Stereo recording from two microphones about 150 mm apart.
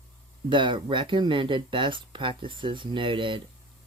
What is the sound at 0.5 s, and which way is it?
Speech, 35° right (ahead or behind).